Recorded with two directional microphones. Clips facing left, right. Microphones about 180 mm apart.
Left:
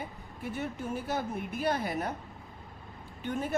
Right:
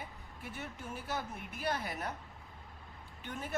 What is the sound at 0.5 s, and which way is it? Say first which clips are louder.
Speech: left 9 dB; 25° left (ahead or behind).